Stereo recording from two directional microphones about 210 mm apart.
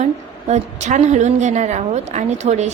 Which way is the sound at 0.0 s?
35° right (ahead or behind).